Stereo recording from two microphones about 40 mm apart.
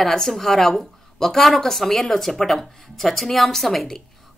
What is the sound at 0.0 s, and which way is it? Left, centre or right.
A woman's voice, centre.